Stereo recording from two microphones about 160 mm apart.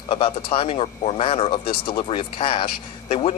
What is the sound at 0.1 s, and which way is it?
A man's voice, 35° left (ahead or behind).